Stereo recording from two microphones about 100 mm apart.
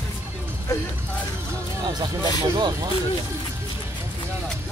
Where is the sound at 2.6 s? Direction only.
45° right (ahead or behind).